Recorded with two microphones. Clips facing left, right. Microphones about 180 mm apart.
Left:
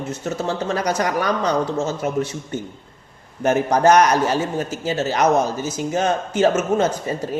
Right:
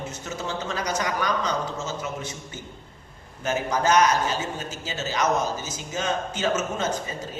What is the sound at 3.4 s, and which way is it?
Speech, 55° left (ahead or behind).